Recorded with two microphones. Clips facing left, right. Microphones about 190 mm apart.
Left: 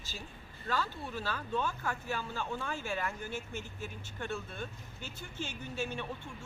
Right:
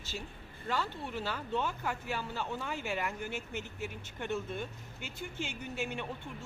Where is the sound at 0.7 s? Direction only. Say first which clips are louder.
Even; 15° right (ahead or behind).